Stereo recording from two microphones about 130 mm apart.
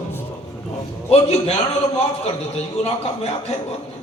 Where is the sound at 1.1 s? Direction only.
55° left (ahead or behind).